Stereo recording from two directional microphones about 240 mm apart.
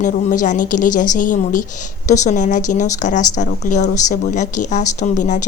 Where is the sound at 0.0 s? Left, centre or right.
Left.